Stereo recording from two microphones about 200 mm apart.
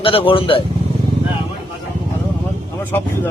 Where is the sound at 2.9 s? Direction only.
10° left (ahead or behind).